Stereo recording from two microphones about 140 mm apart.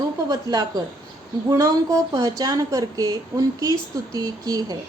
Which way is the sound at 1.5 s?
30° right (ahead or behind).